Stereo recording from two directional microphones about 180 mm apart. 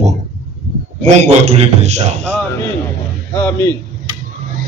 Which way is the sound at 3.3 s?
10° left (ahead or behind).